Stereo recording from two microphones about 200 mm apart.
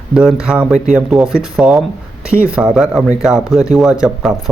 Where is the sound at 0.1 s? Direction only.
5° right (ahead or behind).